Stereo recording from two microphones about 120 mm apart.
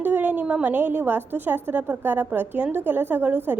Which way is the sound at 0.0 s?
15° right (ahead or behind).